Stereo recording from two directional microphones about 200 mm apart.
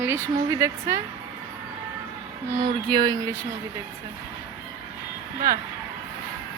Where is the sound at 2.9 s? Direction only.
20° right (ahead or behind).